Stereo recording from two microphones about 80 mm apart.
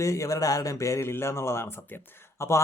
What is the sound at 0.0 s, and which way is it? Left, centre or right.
Speech, left.